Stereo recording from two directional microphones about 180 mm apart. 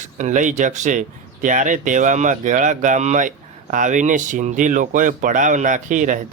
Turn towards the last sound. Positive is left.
turn(degrees=-45)  # may be behind; listen again after turning